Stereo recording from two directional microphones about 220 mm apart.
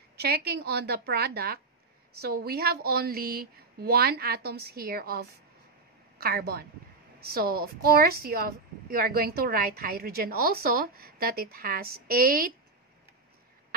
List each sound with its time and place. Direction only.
0.2 s a woman's voice: 45° right (ahead or behind)